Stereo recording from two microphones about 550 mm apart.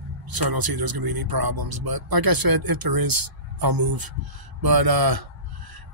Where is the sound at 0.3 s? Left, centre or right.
Right.